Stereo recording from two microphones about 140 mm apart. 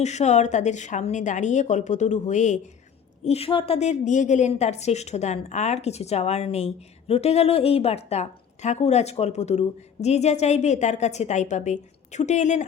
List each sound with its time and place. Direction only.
0.0 s a woman's voice: 55° left (ahead or behind)
3.2 s a woman's voice: 45° left (ahead or behind)